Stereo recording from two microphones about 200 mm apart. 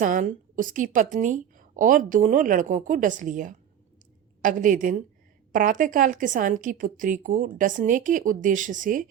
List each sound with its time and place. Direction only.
0.0 s a woman's voice: 40° right (ahead or behind)